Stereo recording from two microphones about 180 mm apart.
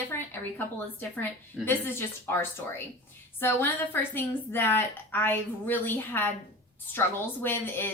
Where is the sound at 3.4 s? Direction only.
10° left (ahead or behind).